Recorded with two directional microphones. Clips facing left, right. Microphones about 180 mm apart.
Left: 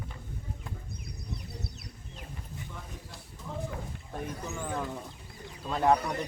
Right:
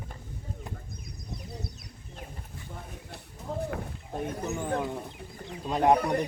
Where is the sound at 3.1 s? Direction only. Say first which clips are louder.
Right 5 dB; 65° right (ahead or behind).